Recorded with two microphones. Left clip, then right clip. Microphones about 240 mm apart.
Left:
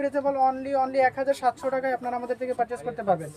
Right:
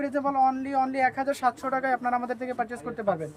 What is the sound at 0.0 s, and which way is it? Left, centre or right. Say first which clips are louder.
Speech: left 1 dB; centre.